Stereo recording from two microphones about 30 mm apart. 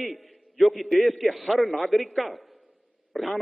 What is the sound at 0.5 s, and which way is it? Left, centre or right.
A man's voice, centre.